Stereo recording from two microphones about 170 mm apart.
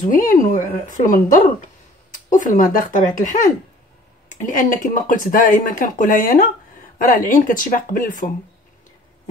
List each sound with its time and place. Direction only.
0.1 s speech: 55° left (ahead or behind)
4.4 s speech: 50° left (ahead or behind)